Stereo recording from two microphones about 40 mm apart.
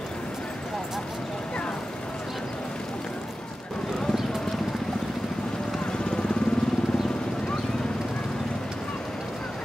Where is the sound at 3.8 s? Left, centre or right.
Centre.